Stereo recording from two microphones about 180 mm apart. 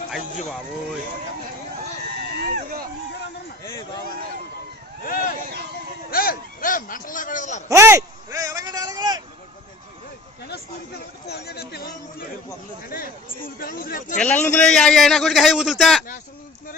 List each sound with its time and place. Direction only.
2.4 s sheep: 50° right (ahead or behind)
3.6 s speech: 20° left (ahead or behind)
5.0 s a man's voice: 50° left (ahead or behind)
7.7 s speech: 15° right (ahead or behind)
11.3 s speech: 60° left (ahead or behind)
13.4 s speech: 55° left (ahead or behind)
14.2 s a man's voice: 10° left (ahead or behind)